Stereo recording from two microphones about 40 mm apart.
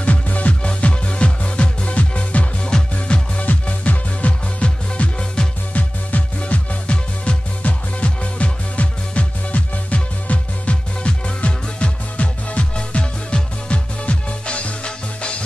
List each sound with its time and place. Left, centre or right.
0.0 s music: left
5.7 s music: left